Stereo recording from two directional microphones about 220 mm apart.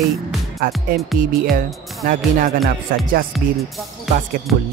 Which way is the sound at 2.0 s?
40° right (ahead or behind).